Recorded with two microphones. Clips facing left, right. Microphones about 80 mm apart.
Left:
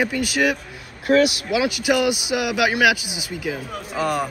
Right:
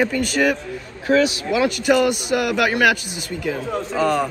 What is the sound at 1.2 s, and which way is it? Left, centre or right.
Speech, right.